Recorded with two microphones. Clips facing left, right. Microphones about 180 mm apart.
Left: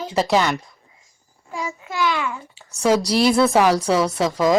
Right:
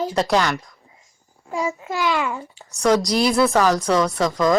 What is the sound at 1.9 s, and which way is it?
Speech, 40° right (ahead or behind).